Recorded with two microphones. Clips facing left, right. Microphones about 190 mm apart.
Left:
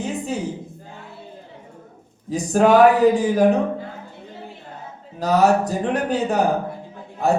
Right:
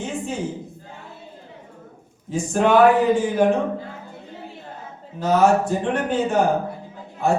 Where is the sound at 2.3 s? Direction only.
40° left (ahead or behind).